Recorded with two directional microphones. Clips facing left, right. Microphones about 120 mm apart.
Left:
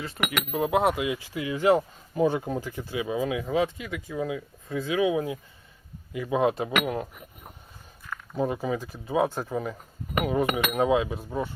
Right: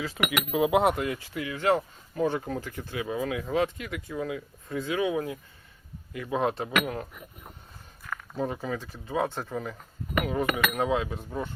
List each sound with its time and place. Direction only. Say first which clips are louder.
0.2 s speech: right 2 dB; 5° right (ahead or behind)